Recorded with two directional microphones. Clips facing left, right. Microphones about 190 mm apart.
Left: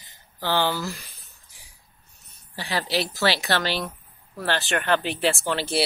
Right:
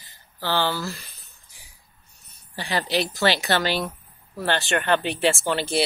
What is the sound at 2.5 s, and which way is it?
Speech, 5° left (ahead or behind).